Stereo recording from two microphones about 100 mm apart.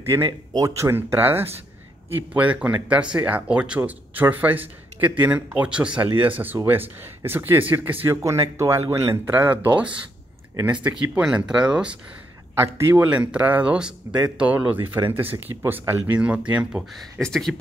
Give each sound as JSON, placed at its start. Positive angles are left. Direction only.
{"t": 0.0, "sound": "a man's voice", "side_deg": -25}
{"t": 0.3, "sound": "speech", "side_deg": -40}
{"t": 8.2, "sound": "speech", "side_deg": -30}
{"t": 12.5, "sound": "a man's voice", "side_deg": -30}
{"t": 12.9, "sound": "speech", "side_deg": -15}
{"t": 17.2, "sound": "speech", "side_deg": 5}